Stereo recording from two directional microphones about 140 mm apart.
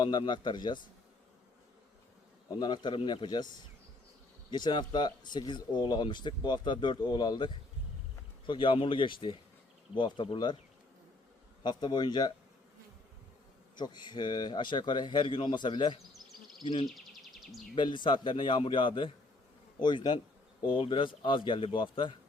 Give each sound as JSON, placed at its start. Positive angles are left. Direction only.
{"t": 0.0, "sound": "speech", "side_deg": 30}
{"t": 2.6, "sound": "speech", "side_deg": 30}
{"t": 4.5, "sound": "speech", "side_deg": 30}
{"t": 11.6, "sound": "speech", "side_deg": 30}
{"t": 13.7, "sound": "speech", "side_deg": 30}
{"t": 16.8, "sound": "a sound", "side_deg": 0}
{"t": 17.7, "sound": "speech", "side_deg": 35}